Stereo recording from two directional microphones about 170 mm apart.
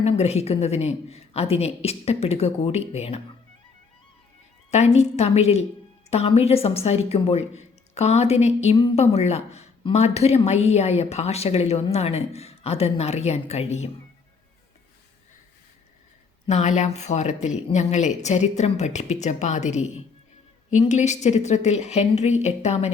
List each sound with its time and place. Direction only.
0.0 s a woman's voice: 40° left (ahead or behind)
4.7 s a woman's voice: 40° left (ahead or behind)
16.5 s a woman's voice: 40° left (ahead or behind)